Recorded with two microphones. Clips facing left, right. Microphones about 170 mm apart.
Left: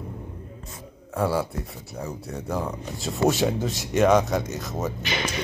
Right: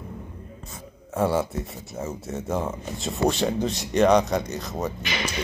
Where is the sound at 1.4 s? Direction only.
Centre (ahead or behind).